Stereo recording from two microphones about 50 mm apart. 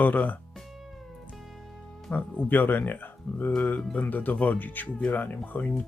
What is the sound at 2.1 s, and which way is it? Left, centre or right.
Speech, left.